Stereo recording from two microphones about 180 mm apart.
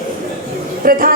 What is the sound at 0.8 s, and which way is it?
Speech, 50° right (ahead or behind).